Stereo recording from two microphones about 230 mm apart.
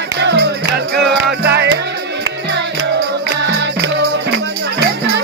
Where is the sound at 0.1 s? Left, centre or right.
Right.